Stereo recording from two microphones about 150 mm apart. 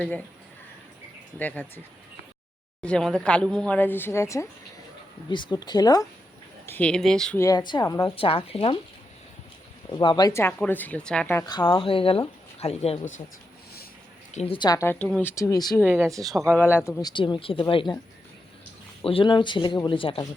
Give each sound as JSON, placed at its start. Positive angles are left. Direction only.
{"t": 1.4, "sound": "speech", "side_deg": 10}
{"t": 2.8, "sound": "speech", "side_deg": 5}
{"t": 5.3, "sound": "speech", "side_deg": 30}
{"t": 6.7, "sound": "speech", "side_deg": 10}
{"t": 7.3, "sound": "speech", "side_deg": 25}
{"t": 8.0, "sound": "speech", "side_deg": 40}
{"t": 9.9, "sound": "speech", "side_deg": 30}
{"t": 11.7, "sound": "speech", "side_deg": 35}
{"t": 14.3, "sound": "speech", "side_deg": 40}
{"t": 14.8, "sound": "speech", "side_deg": 10}
{"t": 15.9, "sound": "speech", "side_deg": -20}
{"t": 16.5, "sound": "speech", "side_deg": 15}
{"t": 19.0, "sound": "speech", "side_deg": 35}